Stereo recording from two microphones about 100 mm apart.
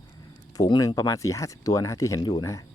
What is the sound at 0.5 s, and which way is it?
Speech, 40° left (ahead or behind).